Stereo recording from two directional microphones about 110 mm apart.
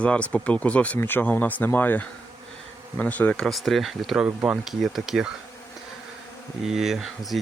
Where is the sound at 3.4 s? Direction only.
Centre (ahead or behind).